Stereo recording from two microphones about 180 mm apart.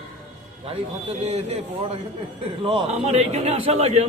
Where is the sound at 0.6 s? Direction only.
35° right (ahead or behind).